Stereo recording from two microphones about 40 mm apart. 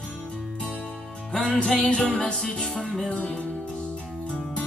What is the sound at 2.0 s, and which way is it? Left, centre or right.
Music, left.